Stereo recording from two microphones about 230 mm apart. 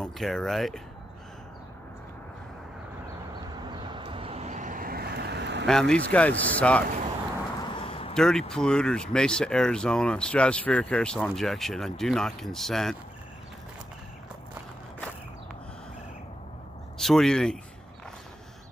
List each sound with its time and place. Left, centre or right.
0.0 s speech: centre
3.6 s vehicle: centre; by 5.7 s right
5.7 s speech: centre
7.7 s a sound: left
8.1 s speech: centre
17.0 s speech: centre